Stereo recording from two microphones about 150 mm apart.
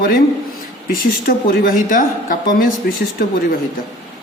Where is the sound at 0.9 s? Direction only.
75° left (ahead or behind).